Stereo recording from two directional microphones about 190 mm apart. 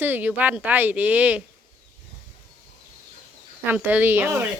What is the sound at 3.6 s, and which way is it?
Speech, 10° right (ahead or behind).